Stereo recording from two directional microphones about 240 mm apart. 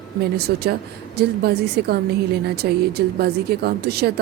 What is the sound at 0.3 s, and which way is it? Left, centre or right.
A woman's voice, right.